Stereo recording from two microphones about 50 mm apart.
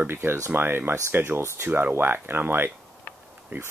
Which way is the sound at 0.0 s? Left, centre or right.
Right.